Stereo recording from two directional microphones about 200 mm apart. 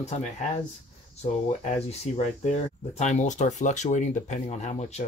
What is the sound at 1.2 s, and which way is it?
Speech, 35° left (ahead or behind).